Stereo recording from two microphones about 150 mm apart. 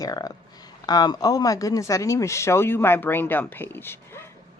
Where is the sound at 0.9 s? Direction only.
25° left (ahead or behind).